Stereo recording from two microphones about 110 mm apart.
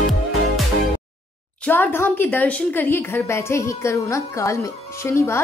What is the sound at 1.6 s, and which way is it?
A woman's voice, 20° left (ahead or behind).